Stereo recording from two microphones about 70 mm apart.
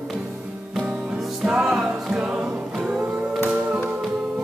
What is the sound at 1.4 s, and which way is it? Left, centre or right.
Music, centre.